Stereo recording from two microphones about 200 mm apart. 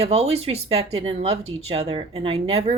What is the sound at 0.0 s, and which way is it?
A woman's voice, 30° right (ahead or behind).